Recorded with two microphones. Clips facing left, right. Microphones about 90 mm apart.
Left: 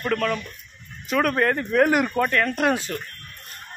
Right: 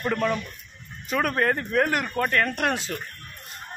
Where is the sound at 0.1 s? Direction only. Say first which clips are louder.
Left 2 dB; 15° right (ahead or behind).